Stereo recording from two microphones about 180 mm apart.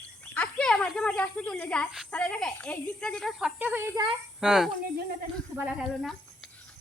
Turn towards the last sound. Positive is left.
turn(degrees=0)  # may be behind; listen again after turning